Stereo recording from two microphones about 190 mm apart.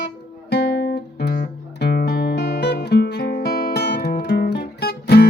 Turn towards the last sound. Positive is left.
turn(degrees=55)  # may be behind; listen again after turning